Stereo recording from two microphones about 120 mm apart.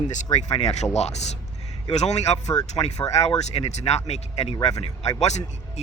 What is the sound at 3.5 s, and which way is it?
Speech, 65° left (ahead or behind).